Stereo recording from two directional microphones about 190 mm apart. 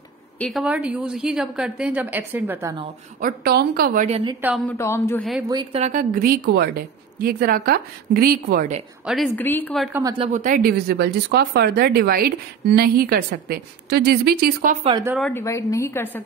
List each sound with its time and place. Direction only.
0.4 s a woman's voice: centre (ahead or behind)
3.2 s speech: 50° right (ahead or behind)
4.1 s a woman's voice: 25° right (ahead or behind)
4.6 s a woman's voice: 15° left (ahead or behind)
5.5 s a woman's voice: 20° right (ahead or behind)
5.8 s speech: 45° right (ahead or behind)
9.0 s a woman's voice: centre (ahead or behind)
9.3 s a woman's voice: 10° left (ahead or behind)
10.1 s speech: 35° right (ahead or behind)
15.3 s a woman's voice: 15° left (ahead or behind)